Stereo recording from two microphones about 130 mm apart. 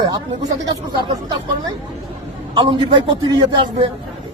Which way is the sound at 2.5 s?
35° right (ahead or behind).